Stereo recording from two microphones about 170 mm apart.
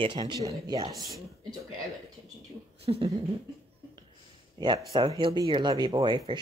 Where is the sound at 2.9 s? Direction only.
30° right (ahead or behind).